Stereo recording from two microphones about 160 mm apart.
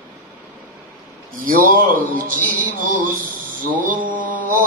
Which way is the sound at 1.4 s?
60° right (ahead or behind).